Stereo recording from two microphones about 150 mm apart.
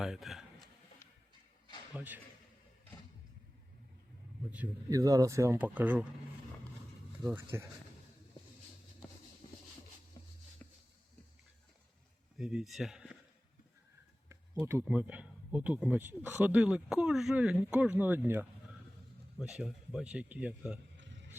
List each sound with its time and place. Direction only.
0.0 s speech: centre (ahead or behind)
1.9 s a man's voice: 10° right (ahead or behind)
4.9 s speech: 20° right (ahead or behind)
7.5 s speech: 15° right (ahead or behind)
9.4 s a sound: 35° left (ahead or behind)
10.6 s a sound: 10° left (ahead or behind)
12.4 s speech: 5° right (ahead or behind)
14.6 s speech: 15° right (ahead or behind)